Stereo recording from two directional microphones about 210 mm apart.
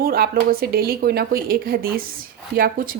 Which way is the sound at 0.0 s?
45° right (ahead or behind).